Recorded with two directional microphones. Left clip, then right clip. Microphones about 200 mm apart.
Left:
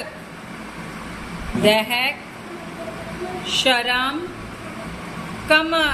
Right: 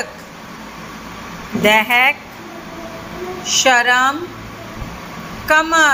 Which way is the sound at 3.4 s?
20° right (ahead or behind).